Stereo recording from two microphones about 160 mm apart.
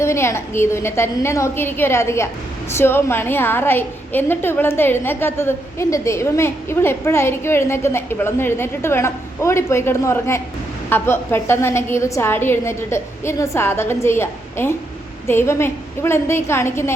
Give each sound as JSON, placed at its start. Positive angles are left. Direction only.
{"t": 0.0, "sound": "a woman's voice", "side_deg": 15}